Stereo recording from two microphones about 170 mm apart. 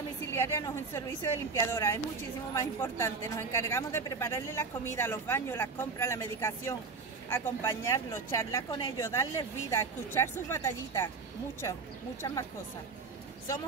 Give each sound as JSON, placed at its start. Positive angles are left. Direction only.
{"t": 0.3, "sound": "a woman's voice", "side_deg": 15}